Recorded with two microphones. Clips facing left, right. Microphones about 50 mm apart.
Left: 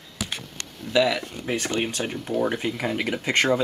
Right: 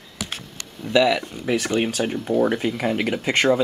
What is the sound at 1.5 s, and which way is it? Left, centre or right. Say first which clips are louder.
Speech: right 4 dB; right.